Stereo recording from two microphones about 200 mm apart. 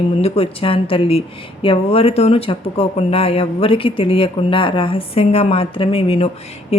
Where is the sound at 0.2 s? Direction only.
30° left (ahead or behind).